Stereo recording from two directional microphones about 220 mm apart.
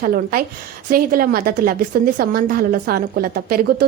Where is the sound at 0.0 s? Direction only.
40° right (ahead or behind).